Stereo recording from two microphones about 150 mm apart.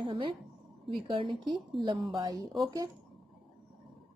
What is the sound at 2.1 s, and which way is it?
Speech, 25° right (ahead or behind).